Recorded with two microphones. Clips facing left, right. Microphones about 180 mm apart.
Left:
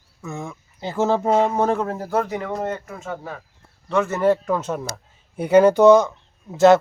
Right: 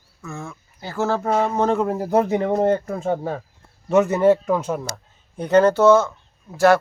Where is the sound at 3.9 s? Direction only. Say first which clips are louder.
Right 3 dB; 20° right (ahead or behind).